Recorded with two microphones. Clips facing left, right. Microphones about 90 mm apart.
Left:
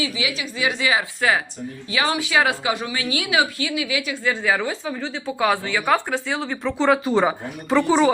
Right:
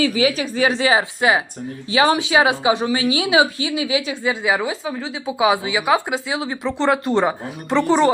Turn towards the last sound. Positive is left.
turn(degrees=0)  # may be behind; listen again after turning